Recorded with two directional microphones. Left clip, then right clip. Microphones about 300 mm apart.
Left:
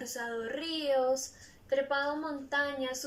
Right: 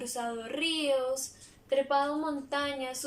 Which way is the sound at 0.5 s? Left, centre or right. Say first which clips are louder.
Right 2 dB; centre.